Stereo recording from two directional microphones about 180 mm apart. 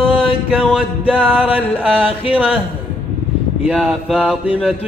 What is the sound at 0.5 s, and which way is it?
Music, 5° left (ahead or behind).